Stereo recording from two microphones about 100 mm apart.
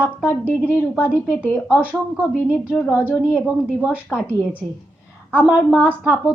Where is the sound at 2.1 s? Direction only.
10° right (ahead or behind).